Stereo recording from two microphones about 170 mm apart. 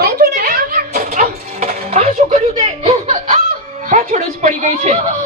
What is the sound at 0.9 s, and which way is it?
Music, 45° right (ahead or behind).